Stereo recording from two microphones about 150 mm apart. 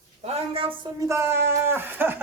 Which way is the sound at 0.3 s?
40° right (ahead or behind).